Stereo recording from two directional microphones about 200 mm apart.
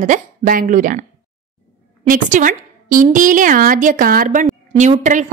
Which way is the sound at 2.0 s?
40° right (ahead or behind).